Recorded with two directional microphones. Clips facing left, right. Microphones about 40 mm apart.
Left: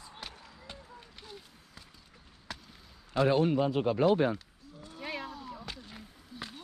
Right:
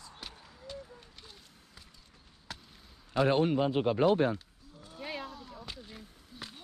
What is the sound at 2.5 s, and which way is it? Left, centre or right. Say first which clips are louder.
Basketball bounce: left 2 dB; centre.